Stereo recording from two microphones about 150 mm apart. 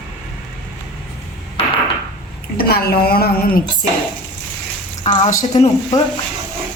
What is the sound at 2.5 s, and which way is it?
Speech, 90° left.